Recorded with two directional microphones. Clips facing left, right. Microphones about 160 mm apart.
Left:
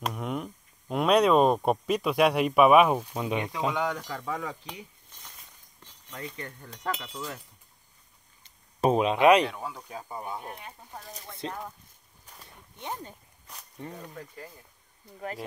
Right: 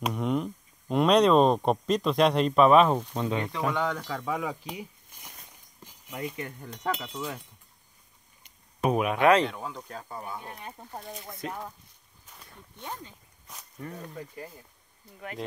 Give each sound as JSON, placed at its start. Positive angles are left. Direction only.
{"t": 0.0, "sound": "speech", "side_deg": 0}
{"t": 4.3, "sound": "a sound", "side_deg": -10}
{"t": 5.8, "sound": "speech", "side_deg": -10}
{"t": 8.8, "sound": "speech", "side_deg": 25}
{"t": 9.5, "sound": "speech", "side_deg": 5}
{"t": 10.6, "sound": "speech", "side_deg": -35}
{"t": 11.4, "sound": "speech", "side_deg": -5}
{"t": 12.7, "sound": "speech", "side_deg": 15}
{"t": 13.8, "sound": "speech", "side_deg": 25}
{"t": 14.1, "sound": "speech", "side_deg": -15}